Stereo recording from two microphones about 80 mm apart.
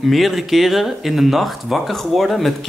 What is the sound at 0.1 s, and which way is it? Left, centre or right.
Speech, centre.